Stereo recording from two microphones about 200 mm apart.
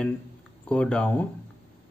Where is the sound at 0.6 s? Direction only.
5° left (ahead or behind).